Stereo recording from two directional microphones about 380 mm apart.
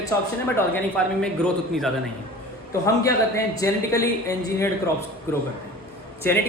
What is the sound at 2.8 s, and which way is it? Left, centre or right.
A man's voice, centre.